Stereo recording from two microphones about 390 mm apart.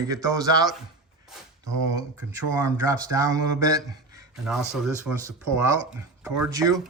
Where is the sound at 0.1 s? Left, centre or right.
Centre.